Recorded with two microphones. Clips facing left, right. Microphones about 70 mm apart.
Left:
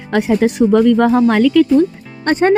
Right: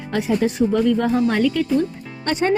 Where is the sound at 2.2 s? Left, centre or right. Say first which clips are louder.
Left 7 dB; left.